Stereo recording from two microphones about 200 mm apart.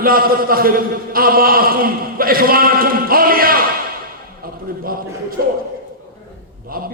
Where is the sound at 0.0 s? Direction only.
45° right (ahead or behind).